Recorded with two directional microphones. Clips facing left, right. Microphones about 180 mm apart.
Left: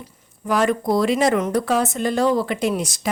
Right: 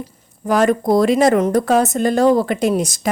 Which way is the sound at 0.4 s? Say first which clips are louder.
Right 4 dB; 45° right (ahead or behind).